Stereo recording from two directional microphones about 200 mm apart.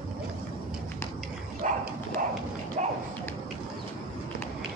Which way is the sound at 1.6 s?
40° right (ahead or behind).